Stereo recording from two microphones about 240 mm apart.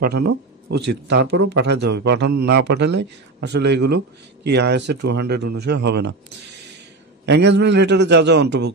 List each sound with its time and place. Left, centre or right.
0.8 s a man's voice: right
7.2 s a man's voice: right